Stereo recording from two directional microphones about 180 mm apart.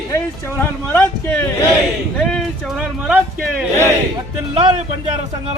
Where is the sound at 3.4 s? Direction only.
5° right (ahead or behind).